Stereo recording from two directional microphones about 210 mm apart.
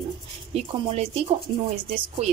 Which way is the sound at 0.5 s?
30° right (ahead or behind).